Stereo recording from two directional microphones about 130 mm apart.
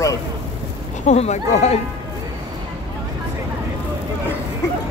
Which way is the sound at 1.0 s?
60° left (ahead or behind).